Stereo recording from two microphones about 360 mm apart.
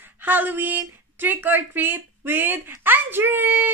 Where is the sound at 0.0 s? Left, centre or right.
Centre.